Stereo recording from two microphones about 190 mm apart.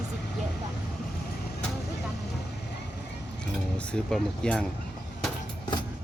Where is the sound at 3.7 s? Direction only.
5° left (ahead or behind).